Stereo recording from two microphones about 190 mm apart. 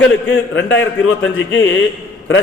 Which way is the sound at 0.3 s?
75° left (ahead or behind).